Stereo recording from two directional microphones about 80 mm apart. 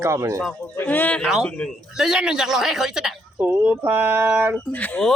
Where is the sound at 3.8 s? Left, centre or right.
Right.